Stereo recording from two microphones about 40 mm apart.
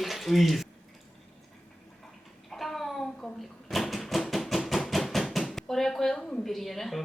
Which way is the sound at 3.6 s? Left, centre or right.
Centre.